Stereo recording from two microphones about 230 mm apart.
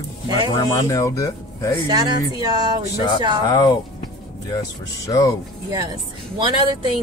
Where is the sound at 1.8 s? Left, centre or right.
Centre.